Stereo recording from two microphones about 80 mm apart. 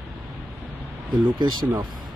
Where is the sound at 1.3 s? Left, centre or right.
Right.